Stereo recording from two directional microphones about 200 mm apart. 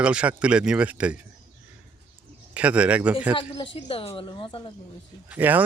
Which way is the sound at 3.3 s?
25° left (ahead or behind).